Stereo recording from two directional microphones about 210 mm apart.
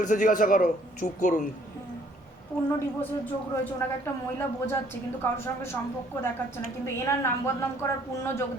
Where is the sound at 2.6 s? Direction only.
10° left (ahead or behind).